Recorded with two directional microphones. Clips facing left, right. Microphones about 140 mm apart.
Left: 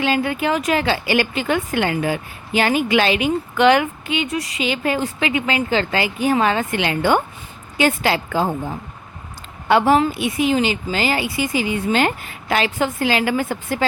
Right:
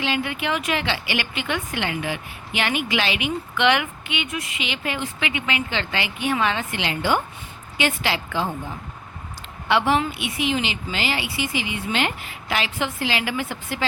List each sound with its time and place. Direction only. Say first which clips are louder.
0.0 s a woman's voice: left 6 dB; 40° left (ahead or behind)